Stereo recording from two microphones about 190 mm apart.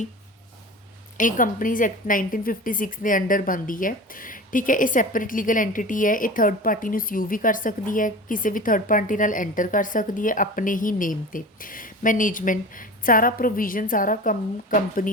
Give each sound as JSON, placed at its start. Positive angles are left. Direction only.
{"t": 1.1, "sound": "a woman's voice", "side_deg": 45}